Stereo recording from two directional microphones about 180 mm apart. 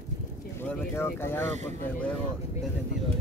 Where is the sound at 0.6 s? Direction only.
10° left (ahead or behind).